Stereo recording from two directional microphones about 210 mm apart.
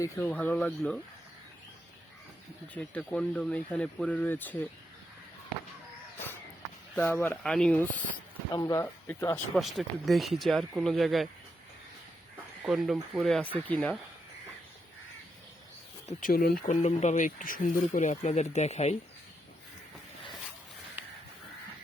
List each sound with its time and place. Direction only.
0.0 s speech: 10° left (ahead or behind)
2.7 s speech: 5° left (ahead or behind)
6.9 s speech: 10° left (ahead or behind)
8.5 s speech: 15° left (ahead or behind); by 11.3 s centre (ahead or behind)
12.6 s speech: centre (ahead or behind)
16.0 s speech: 40° left (ahead or behind)
16.7 s speech: 30° left (ahead or behind)